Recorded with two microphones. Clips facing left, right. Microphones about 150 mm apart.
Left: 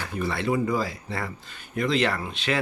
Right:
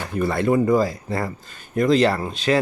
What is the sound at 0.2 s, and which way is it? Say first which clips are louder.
Speech: right 6 dB; 50° right (ahead or behind).